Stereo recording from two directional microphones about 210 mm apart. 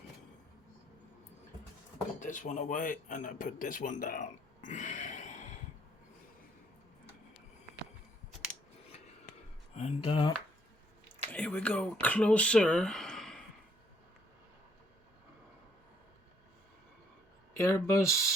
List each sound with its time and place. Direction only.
2.2 s speech: 35° left (ahead or behind)
9.7 s speech: 30° left (ahead or behind)
11.3 s speech: 5° left (ahead or behind)
17.6 s speech: 15° left (ahead or behind)